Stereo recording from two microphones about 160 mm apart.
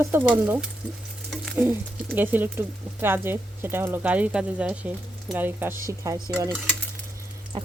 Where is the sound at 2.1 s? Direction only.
10° right (ahead or behind).